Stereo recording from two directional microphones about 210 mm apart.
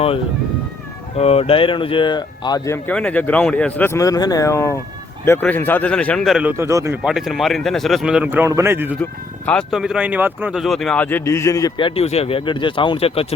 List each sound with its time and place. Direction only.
1.1 s a man's voice: 30° left (ahead or behind); by 9.0 s 10° right (ahead or behind)
9.5 s speech: centre (ahead or behind); by 13.2 s 30° left (ahead or behind)